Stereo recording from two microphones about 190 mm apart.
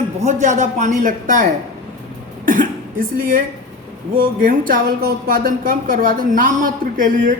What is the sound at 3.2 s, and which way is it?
Speech, 45° right (ahead or behind).